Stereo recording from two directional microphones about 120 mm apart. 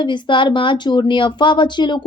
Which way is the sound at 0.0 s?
40° left (ahead or behind).